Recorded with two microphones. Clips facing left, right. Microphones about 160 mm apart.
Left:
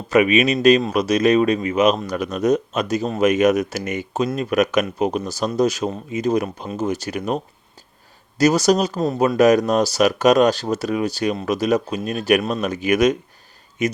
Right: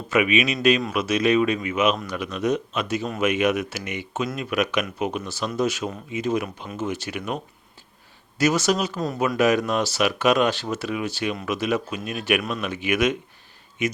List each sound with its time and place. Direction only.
0.1 s speech: 40° left (ahead or behind)